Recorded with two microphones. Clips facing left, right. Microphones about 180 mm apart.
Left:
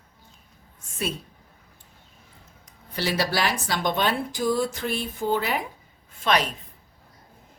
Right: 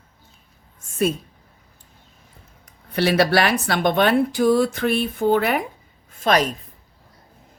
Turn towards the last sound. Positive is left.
turn(degrees=-45)  # may be behind; listen again after turning